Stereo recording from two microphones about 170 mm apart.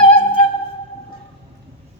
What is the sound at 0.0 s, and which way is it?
Music, 30° left (ahead or behind).